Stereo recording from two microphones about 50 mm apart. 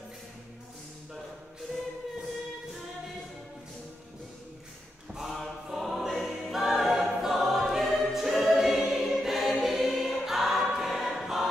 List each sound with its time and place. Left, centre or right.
5.1 s choir: centre